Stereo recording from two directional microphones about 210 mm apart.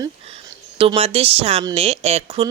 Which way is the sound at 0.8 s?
25° right (ahead or behind).